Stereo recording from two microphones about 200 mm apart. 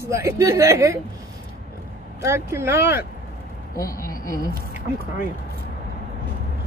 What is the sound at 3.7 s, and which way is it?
Speech, 15° left (ahead or behind).